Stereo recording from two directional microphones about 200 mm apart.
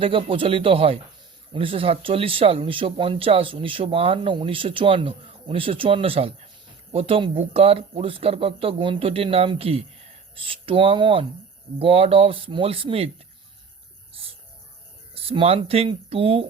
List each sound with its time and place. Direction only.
0.0 s speech: 25° right (ahead or behind)
14.1 s a sound: 30° right (ahead or behind)
15.1 s speech: 30° right (ahead or behind)